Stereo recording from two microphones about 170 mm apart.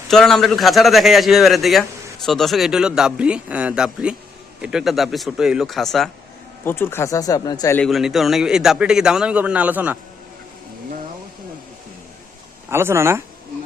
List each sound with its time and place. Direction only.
0.1 s a man's voice: 5° left (ahead or behind)
6.7 s speech: 15° left (ahead or behind)
7.8 s a man's voice: centre (ahead or behind)
12.7 s speech: 15° right (ahead or behind)